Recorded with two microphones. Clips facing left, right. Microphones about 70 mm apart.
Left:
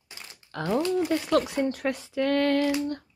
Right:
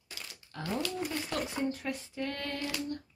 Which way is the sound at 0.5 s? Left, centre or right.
Left.